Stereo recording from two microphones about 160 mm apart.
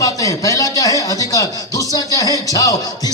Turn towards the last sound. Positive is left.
turn(degrees=20)  # may be behind; listen again after turning